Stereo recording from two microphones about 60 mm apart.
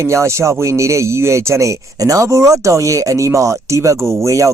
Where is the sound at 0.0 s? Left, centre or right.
Right.